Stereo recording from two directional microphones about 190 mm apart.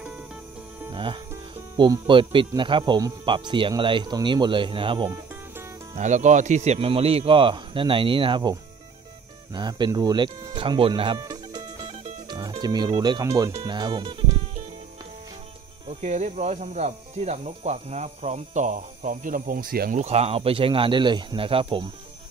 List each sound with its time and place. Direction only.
0.9 s speech: 25° right (ahead or behind)
5.9 s speech: 40° right (ahead or behind)
16.0 s speech: 40° right (ahead or behind)
20.0 s speech: 35° right (ahead or behind)